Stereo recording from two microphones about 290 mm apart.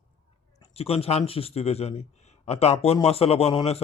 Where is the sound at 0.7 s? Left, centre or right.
Centre.